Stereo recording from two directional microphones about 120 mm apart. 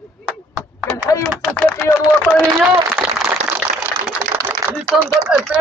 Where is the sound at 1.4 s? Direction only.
Centre (ahead or behind).